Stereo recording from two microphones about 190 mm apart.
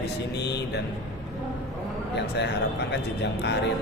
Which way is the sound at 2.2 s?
65° left (ahead or behind).